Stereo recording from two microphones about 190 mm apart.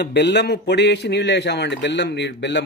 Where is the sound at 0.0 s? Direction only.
65° left (ahead or behind).